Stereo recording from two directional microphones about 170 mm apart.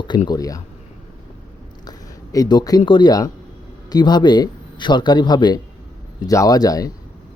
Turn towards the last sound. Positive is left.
turn(degrees=20)  # may be behind; listen again after turning